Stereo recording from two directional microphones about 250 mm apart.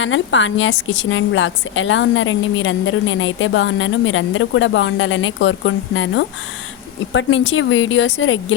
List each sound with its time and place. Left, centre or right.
0.0 s a woman's voice: left